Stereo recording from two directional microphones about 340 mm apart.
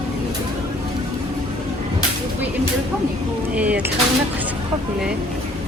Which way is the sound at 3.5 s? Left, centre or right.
Centre.